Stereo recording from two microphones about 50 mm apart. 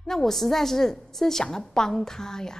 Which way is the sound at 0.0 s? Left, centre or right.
Centre.